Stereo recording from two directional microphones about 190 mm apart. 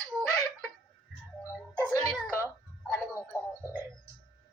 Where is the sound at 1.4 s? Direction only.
15° left (ahead or behind).